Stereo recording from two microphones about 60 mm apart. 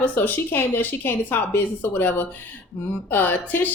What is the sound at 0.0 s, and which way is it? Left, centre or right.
Speech, left.